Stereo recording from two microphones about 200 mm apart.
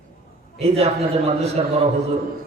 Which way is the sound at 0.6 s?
30° right (ahead or behind).